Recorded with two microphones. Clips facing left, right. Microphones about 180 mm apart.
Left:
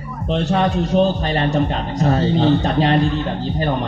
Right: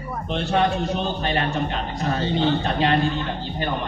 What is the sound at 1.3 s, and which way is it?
Speech, 40° left (ahead or behind).